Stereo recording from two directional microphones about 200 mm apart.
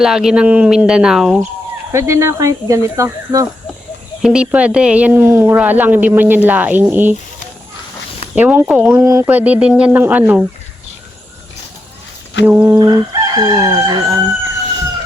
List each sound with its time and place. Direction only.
0.0 s speech: centre (ahead or behind)
1.9 s speech: 15° right (ahead or behind)
4.2 s speech: 5° right (ahead or behind)
8.4 s speech: 5° right (ahead or behind)
12.5 s speech: 10° right (ahead or behind)
12.8 s chicken: 20° right (ahead or behind)